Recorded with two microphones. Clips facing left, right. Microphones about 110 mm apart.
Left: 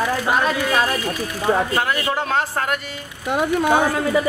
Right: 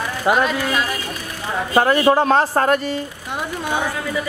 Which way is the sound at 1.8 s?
40° right (ahead or behind).